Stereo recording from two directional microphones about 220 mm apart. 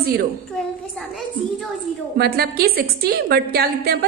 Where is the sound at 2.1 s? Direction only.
45° right (ahead or behind).